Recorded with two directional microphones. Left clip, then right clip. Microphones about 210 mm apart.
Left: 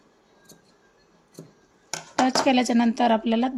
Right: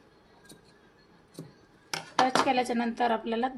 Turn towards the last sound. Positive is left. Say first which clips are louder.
# left 6 dB
turn(degrees=55)  # may be behind; listen again after turning